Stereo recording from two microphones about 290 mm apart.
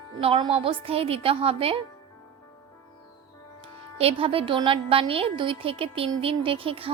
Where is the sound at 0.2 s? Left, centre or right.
Centre.